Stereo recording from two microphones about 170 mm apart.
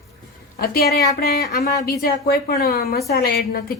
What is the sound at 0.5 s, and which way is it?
A woman's voice, 60° left (ahead or behind).